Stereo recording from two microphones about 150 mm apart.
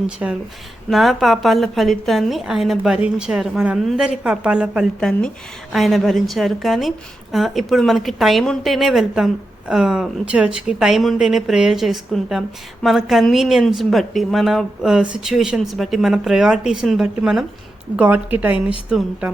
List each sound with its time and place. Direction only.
0.2 s a woman's voice: 10° right (ahead or behind)
4.9 s a woman's voice: 5° left (ahead or behind)